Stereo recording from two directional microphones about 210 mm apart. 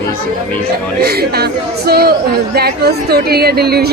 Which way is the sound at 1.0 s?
50° right (ahead or behind).